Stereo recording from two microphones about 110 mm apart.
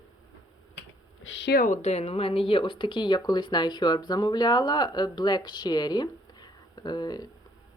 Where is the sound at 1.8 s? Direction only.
75° left (ahead or behind).